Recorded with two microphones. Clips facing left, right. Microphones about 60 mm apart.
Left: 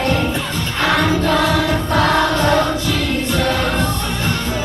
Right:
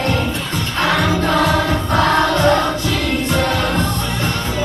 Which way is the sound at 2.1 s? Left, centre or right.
Centre.